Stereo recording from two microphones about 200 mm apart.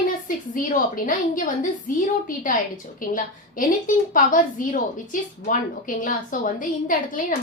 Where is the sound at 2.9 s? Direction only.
40° left (ahead or behind).